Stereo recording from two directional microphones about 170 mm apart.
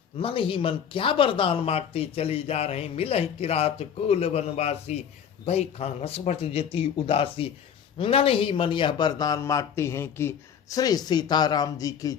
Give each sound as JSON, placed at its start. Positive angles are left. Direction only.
{"t": 0.2, "sound": "a man's voice", "side_deg": 30}